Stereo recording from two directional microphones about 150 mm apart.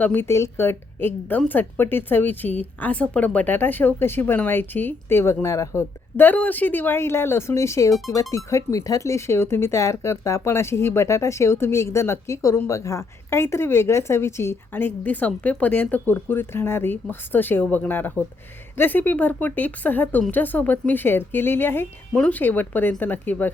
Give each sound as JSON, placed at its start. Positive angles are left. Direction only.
{"t": 0.0, "sound": "speech", "side_deg": 15}